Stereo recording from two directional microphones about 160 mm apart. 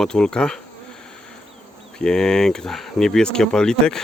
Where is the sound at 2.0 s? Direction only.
5° left (ahead or behind).